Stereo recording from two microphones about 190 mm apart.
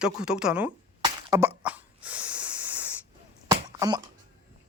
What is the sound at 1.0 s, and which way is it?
Plop, 20° right (ahead or behind).